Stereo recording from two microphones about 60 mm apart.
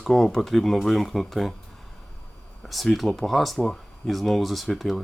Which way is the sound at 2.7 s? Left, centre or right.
Centre.